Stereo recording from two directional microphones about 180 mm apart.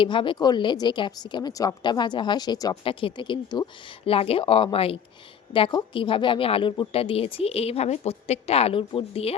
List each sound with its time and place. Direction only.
0.0 s a woman's voice: 25° left (ahead or behind)